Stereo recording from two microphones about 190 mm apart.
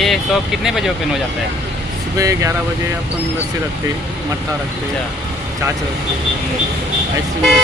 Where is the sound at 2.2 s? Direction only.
15° right (ahead or behind).